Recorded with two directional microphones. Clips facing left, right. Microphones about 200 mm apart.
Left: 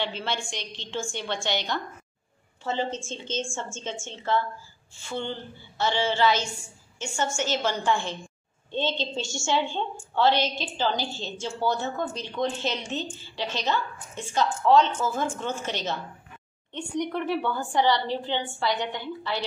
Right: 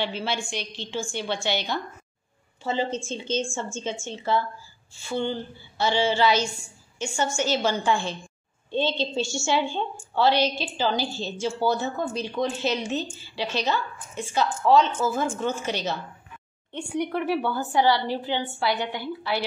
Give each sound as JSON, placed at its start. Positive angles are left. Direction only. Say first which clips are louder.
{"t": 0.0, "sound": "a woman's voice", "louder": "right 2 dB", "side_deg": -5}